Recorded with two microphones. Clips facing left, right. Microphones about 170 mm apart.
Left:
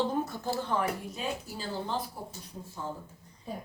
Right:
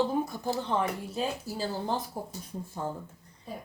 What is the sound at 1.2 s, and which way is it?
Speech, 40° right (ahead or behind).